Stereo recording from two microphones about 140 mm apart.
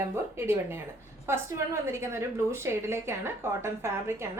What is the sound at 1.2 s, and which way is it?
A woman's voice, 20° right (ahead or behind).